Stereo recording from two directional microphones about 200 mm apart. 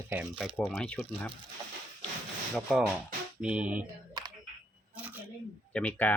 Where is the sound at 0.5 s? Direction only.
5° left (ahead or behind).